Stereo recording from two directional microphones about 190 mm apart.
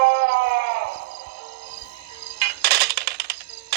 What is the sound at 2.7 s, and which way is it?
Music, 60° right (ahead or behind).